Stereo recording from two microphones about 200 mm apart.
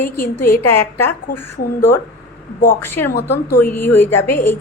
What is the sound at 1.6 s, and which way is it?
Speech, 45° left (ahead or behind).